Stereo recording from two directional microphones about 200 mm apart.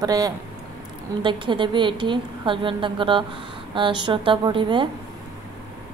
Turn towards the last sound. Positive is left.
turn(degrees=-25)  # may be behind; listen again after turning